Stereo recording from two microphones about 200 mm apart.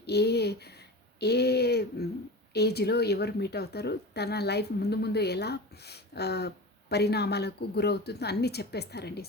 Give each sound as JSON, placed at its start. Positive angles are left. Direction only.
{"t": 0.0, "sound": "a woman's voice", "side_deg": 55}